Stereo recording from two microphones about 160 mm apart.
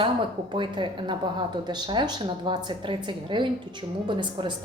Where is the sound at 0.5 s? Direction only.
30° right (ahead or behind).